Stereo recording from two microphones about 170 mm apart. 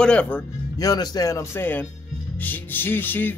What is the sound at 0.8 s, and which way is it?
Speech, 20° left (ahead or behind).